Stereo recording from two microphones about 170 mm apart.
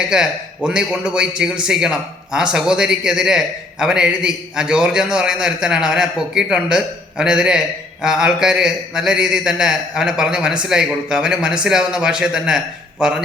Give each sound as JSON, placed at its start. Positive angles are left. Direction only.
{"t": 0.1, "sound": "a man's voice", "side_deg": -5}